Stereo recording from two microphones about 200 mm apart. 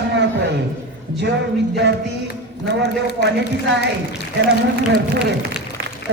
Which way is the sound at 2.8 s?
60° right (ahead or behind).